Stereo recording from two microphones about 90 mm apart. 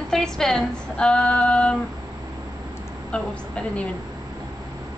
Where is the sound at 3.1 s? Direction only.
10° left (ahead or behind).